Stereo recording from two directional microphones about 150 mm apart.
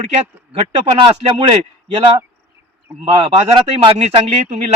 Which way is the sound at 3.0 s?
35° right (ahead or behind).